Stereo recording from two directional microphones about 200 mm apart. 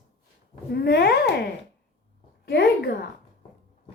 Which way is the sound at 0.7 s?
55° left (ahead or behind).